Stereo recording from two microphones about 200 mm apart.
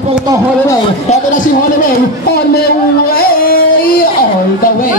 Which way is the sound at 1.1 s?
40° left (ahead or behind).